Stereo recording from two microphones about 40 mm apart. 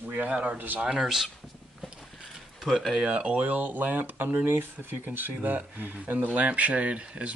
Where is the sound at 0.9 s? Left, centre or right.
Centre.